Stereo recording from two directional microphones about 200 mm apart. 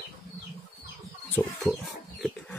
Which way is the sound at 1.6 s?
Centre (ahead or behind).